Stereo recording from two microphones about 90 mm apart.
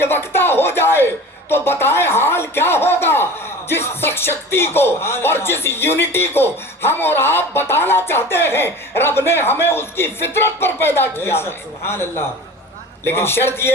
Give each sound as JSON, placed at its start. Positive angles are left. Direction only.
{"t": 0.0, "sound": "speech", "side_deg": 25}